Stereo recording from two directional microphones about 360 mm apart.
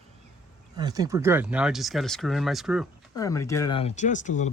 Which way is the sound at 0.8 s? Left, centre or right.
Centre.